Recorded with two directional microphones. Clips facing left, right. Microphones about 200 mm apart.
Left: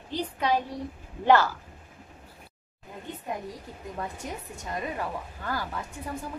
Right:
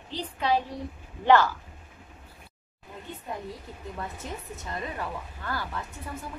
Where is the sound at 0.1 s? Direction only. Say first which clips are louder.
Even; 10° left (ahead or behind).